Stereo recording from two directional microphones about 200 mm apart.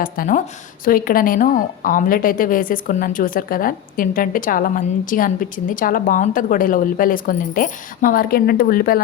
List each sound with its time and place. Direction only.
0.0 s a woman's voice: 40° left (ahead or behind)